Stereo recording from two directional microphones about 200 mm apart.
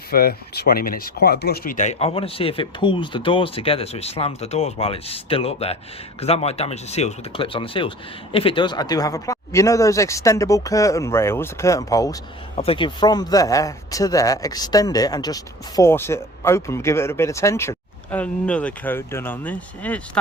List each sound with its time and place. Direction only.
0.1 s speech: 50° left (ahead or behind); by 12.1 s 15° left (ahead or behind)
12.5 s speech: 30° left (ahead or behind); by 20.0 s 5° left (ahead or behind)